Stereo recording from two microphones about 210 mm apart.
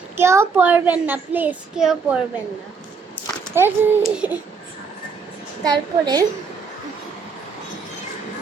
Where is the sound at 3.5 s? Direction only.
10° right (ahead or behind).